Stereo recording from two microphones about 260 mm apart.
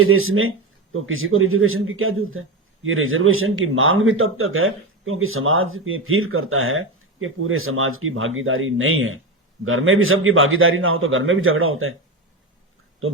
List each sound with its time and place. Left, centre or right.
0.0 s a man's voice: right